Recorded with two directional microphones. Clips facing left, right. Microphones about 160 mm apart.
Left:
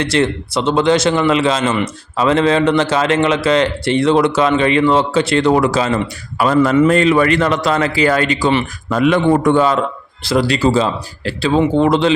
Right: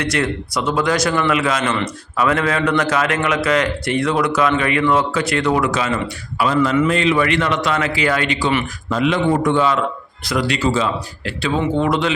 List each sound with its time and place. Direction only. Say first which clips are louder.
0.0 s a man's voice: left 4 dB; 30° left (ahead or behind)
8.9 s a man's voice: left 4 dB; 55° left (ahead or behind); by 12.1 s 30° left (ahead or behind)